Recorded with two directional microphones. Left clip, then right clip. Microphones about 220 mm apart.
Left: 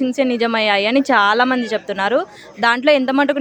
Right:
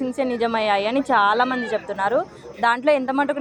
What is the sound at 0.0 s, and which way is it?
A woman's voice, 50° left (ahead or behind).